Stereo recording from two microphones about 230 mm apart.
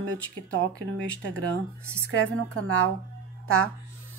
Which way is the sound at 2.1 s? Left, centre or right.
Right.